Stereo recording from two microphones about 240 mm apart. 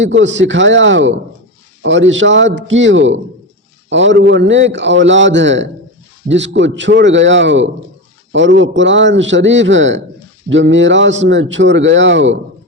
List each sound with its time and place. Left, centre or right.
0.0 s a man's voice: right